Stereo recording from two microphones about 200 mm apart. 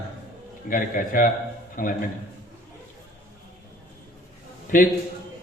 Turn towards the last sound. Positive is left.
turn(degrees=45)  # may be behind; listen again after turning